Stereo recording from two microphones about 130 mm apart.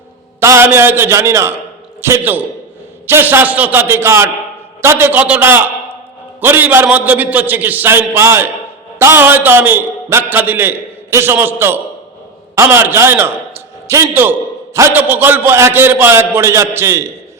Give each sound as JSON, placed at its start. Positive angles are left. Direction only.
{"t": 0.3, "sound": "a man's voice", "side_deg": -20}